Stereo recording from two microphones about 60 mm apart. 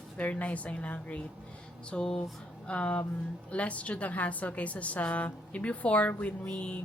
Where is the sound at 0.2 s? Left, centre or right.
Left.